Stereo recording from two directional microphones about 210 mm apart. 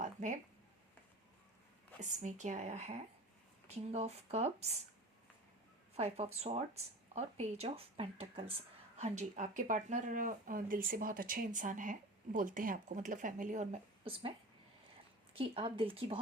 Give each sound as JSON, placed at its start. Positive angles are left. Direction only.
{"t": 0.0, "sound": "a sound", "side_deg": -35}
{"t": 2.0, "sound": "speech", "side_deg": -35}
{"t": 5.9, "sound": "speech", "side_deg": -30}
{"t": 15.4, "sound": "speech", "side_deg": -25}